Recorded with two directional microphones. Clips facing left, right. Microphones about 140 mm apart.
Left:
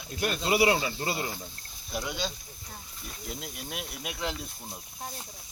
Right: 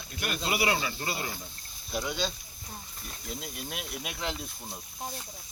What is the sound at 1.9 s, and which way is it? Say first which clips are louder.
Speech: right 1 dB; 5° left (ahead or behind).